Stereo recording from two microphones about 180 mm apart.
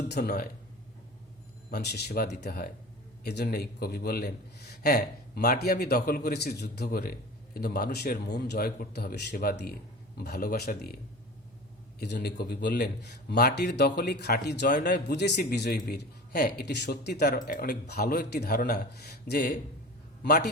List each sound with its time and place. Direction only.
0.1 s a man's voice: 65° left (ahead or behind)
1.7 s a man's voice: 65° left (ahead or behind)
11.9 s a man's voice: 65° left (ahead or behind)